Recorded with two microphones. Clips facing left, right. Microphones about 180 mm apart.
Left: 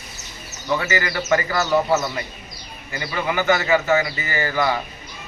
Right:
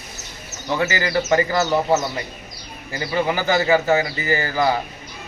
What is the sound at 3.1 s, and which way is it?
A man's voice, 30° right (ahead or behind).